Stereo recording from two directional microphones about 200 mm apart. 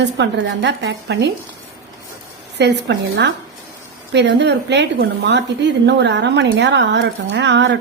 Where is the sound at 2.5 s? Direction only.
60° right (ahead or behind).